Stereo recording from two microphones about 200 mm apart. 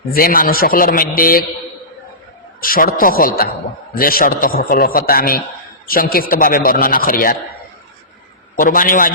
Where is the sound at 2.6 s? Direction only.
45° left (ahead or behind).